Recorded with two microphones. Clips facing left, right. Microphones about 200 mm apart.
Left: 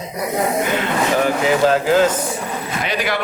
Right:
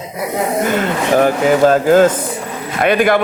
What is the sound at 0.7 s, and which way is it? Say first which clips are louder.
Speech: right 4 dB; 45° right (ahead or behind).